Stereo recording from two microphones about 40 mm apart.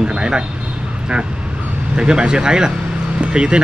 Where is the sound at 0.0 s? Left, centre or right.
Right.